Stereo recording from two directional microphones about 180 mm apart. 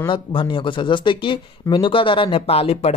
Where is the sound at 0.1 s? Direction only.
30° left (ahead or behind).